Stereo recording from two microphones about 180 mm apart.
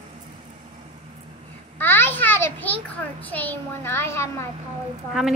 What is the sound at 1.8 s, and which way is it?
A child's voice, 10° left (ahead or behind).